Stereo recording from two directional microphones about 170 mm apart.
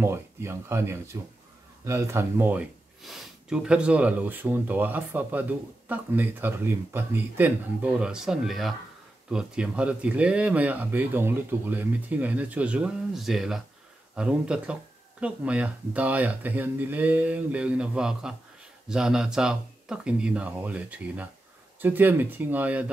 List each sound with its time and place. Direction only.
0.0 s speech: 15° right (ahead or behind)